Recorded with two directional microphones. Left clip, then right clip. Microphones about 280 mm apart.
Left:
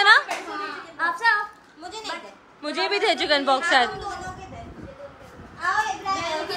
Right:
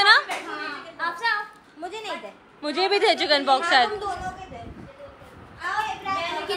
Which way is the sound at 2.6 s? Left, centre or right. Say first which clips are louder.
Right 2 dB; centre.